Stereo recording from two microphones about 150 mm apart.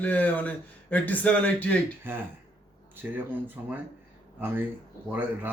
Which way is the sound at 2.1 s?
15° right (ahead or behind).